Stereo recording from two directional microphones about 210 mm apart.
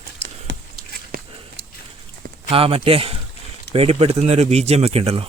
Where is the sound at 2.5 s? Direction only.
25° right (ahead or behind).